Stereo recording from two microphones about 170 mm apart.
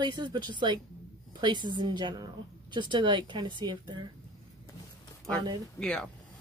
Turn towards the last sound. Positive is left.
turn(degrees=5)  # may be behind; listen again after turning